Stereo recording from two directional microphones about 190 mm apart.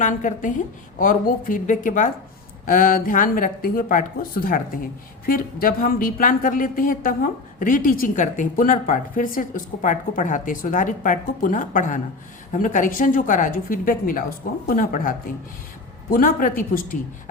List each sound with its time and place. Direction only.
0.0 s a woman's voice: 40° left (ahead or behind)